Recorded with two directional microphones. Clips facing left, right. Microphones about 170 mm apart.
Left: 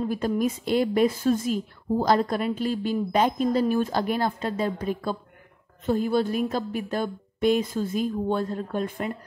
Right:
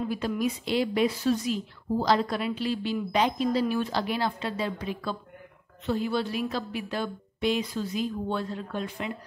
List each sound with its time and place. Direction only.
0.1 s a woman's voice: 45° left (ahead or behind)